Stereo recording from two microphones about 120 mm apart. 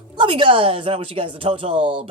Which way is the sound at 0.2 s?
45° right (ahead or behind).